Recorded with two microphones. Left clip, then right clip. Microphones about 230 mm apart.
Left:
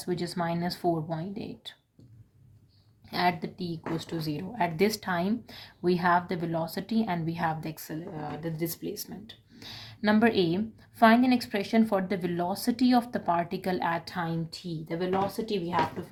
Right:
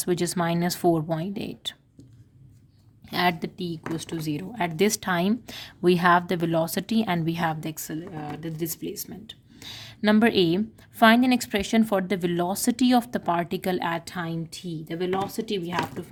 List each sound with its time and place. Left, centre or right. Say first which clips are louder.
0.0 s a woman's voice: right 6 dB; right
3.1 s a woman's voice: right 3 dB; right